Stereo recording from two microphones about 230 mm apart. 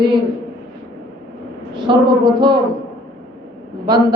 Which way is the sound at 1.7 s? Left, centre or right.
Centre.